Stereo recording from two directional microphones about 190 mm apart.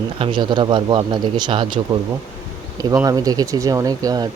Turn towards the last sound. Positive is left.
turn(degrees=-20)  # may be behind; listen again after turning